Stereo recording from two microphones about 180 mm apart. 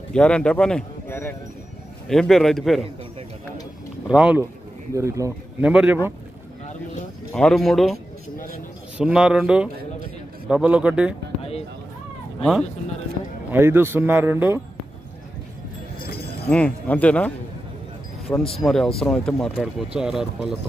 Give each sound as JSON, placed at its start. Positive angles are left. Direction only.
{"t": 0.1, "sound": "a man's voice", "side_deg": 5}
{"t": 4.1, "sound": "a man's voice", "side_deg": -5}
{"t": 4.9, "sound": "a man's voice", "side_deg": -15}
{"t": 7.3, "sound": "a man's voice", "side_deg": 0}
{"t": 13.5, "sound": "a man's voice", "side_deg": -15}
{"t": 16.4, "sound": "speech", "side_deg": 5}